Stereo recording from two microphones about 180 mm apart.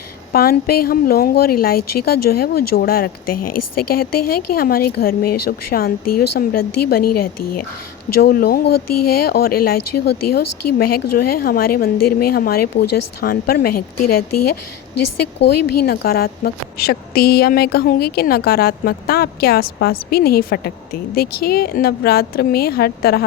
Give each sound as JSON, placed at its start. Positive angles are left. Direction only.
{"t": 0.3, "sound": "a woman's voice", "side_deg": 60}
{"t": 15.4, "sound": "a woman's voice", "side_deg": 60}